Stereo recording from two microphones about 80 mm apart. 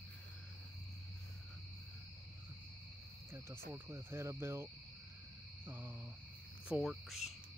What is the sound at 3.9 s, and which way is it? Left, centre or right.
Speech, right.